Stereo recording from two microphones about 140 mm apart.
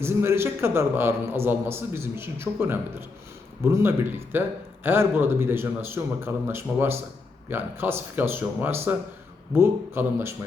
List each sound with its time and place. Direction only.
0.0 s a man's voice: 15° right (ahead or behind)